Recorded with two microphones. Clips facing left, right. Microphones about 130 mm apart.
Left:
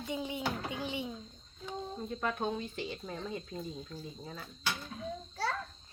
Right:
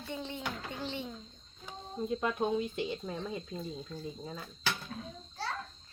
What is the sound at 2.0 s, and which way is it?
Speech, 15° right (ahead or behind).